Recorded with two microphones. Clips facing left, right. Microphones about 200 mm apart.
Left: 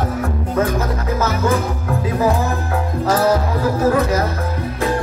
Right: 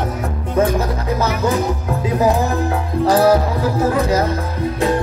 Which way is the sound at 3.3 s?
30° right (ahead or behind).